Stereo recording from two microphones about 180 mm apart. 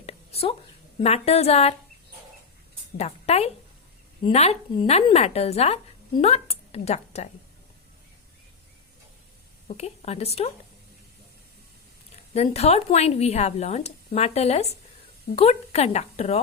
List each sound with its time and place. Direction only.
0.0 s a sound: 35° left (ahead or behind)
1.0 s speech: 35° left (ahead or behind)
3.0 s speech: 35° left (ahead or behind)
9.6 s speech: 35° left (ahead or behind)
12.3 s speech: 35° left (ahead or behind)